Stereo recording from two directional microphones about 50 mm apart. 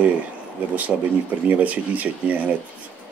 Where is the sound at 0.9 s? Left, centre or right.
Centre.